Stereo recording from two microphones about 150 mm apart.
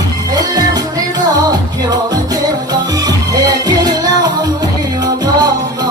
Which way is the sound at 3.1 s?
25° right (ahead or behind).